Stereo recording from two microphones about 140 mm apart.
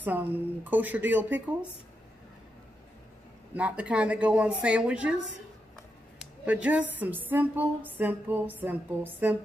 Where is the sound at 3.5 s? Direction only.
10° right (ahead or behind).